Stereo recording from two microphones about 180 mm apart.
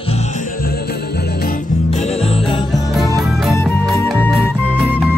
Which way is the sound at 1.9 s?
35° left (ahead or behind).